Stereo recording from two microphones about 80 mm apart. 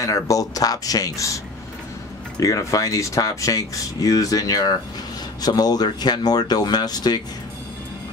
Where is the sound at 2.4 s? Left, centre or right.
Left.